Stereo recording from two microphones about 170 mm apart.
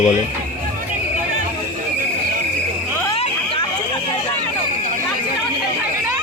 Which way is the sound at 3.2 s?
35° left (ahead or behind).